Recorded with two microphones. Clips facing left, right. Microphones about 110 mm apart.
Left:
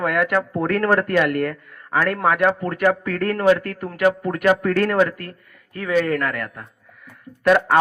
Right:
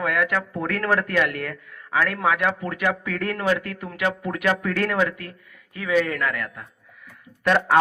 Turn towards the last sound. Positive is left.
turn(degrees=5)  # may be behind; listen again after turning